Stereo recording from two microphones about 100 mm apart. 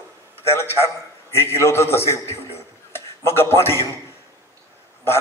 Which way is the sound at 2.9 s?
25° left (ahead or behind).